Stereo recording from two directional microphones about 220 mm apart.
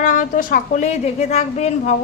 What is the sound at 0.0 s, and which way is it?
A woman's voice, 35° left (ahead or behind).